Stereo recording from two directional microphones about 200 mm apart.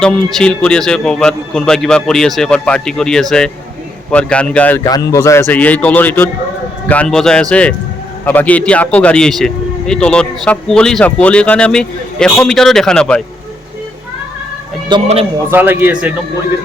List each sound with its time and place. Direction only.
0.0 s a man's voice: 5° left (ahead or behind)
4.8 s a man's voice: 20° left (ahead or behind)
15.0 s a man's voice: 30° right (ahead or behind)
15.4 s a man's voice: 10° right (ahead or behind)